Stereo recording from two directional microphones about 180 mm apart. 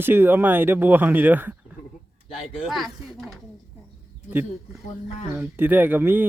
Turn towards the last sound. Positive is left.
turn(degrees=-10)  # may be behind; listen again after turning